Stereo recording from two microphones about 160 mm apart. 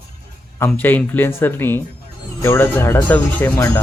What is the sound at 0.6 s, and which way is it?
Speech, 10° left (ahead or behind).